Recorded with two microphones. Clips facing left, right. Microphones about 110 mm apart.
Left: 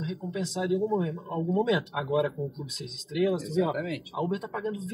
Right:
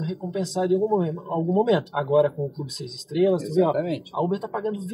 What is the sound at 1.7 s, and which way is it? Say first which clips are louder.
Speech: right 6 dB; 35° right (ahead or behind).